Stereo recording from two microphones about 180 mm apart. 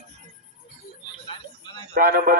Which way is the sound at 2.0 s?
55° right (ahead or behind).